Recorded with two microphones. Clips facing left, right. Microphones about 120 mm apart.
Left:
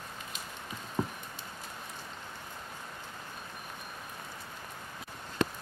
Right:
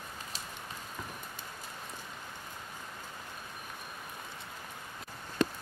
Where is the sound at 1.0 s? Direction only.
40° left (ahead or behind).